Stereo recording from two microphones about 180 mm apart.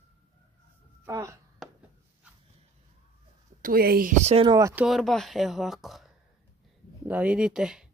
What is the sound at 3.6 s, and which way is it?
Speech, 55° right (ahead or behind).